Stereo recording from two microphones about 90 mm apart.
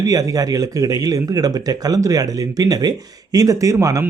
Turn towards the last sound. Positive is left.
turn(degrees=-35)  # may be behind; listen again after turning